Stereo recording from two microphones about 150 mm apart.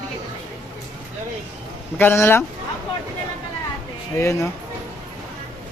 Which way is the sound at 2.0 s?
15° left (ahead or behind).